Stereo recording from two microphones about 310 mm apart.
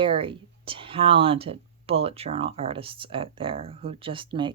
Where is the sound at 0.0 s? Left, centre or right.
Centre.